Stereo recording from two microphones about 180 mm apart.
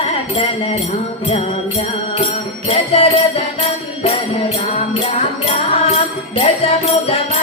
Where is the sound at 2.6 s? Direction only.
35° left (ahead or behind).